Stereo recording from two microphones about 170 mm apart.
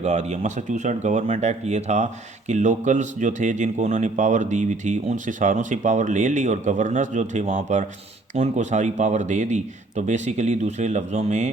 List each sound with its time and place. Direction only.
0.0 s speech: 45° right (ahead or behind)